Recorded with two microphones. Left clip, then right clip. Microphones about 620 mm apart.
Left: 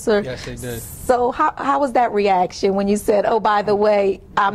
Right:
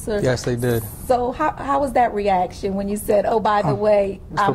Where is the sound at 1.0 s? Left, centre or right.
Left.